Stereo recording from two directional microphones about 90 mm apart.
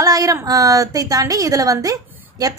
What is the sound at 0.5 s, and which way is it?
A woman's voice, 40° right (ahead or behind).